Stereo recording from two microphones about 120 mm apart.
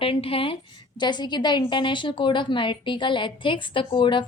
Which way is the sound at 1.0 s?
35° left (ahead or behind).